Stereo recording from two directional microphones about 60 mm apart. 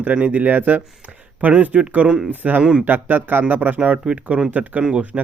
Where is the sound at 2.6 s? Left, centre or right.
Centre.